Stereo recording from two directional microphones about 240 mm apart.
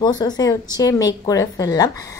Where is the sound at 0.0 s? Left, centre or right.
Centre.